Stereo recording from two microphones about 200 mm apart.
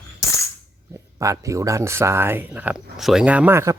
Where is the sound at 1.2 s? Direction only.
15° right (ahead or behind).